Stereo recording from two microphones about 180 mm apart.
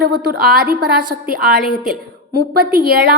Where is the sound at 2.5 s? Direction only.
55° right (ahead or behind).